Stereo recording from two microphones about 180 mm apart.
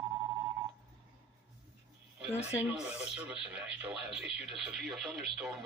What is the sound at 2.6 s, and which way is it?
Speech, 10° right (ahead or behind).